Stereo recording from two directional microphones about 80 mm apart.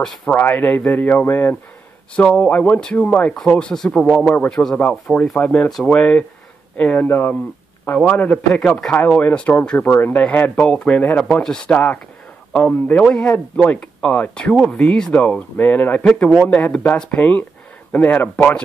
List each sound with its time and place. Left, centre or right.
0.3 s speech: left
2.1 s speech: centre
9.8 s speech: left